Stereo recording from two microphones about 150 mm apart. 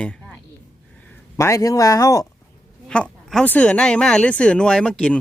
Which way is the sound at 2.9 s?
5° left (ahead or behind).